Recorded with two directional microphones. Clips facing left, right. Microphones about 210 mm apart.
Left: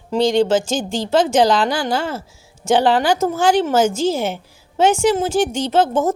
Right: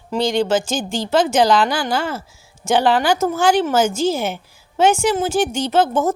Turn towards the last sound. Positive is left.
turn(degrees=20)  # may be behind; listen again after turning